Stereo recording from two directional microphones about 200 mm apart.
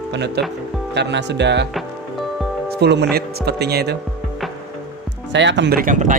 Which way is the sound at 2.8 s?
55° right (ahead or behind).